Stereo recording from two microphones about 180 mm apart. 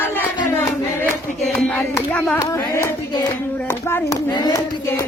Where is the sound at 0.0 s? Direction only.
10° left (ahead or behind).